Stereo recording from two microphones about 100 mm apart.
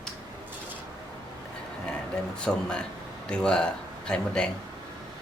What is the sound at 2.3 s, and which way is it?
Speech, 10° left (ahead or behind).